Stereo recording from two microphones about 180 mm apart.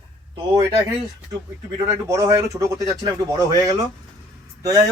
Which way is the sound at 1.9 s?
20° right (ahead or behind).